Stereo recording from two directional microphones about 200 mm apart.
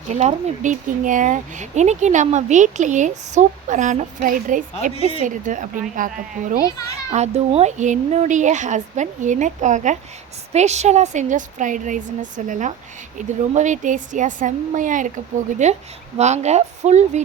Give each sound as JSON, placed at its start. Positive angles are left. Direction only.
{"t": 0.1, "sound": "speech", "side_deg": -35}
{"t": 4.9, "sound": "speech", "side_deg": 30}
{"t": 5.2, "sound": "speech", "side_deg": -40}